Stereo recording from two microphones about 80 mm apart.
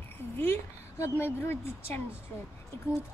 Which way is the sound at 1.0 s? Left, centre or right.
Left.